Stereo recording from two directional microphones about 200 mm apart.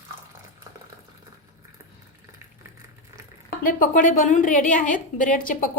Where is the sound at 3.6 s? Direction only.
45° left (ahead or behind).